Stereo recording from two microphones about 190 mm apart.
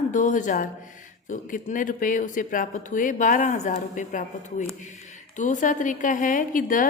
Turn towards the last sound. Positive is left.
turn(degrees=45)  # may be behind; listen again after turning